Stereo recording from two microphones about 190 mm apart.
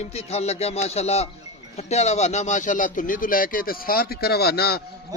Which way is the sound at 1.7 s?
35° left (ahead or behind).